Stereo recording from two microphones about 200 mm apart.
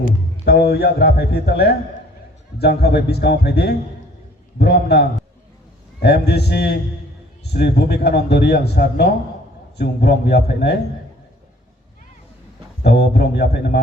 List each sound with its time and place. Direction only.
0.0 s a man's voice: 50° left (ahead or behind)
12.8 s a man's voice: 55° left (ahead or behind)